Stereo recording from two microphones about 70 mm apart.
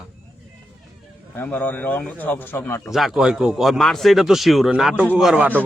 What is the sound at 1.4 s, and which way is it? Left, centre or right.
Speech, left.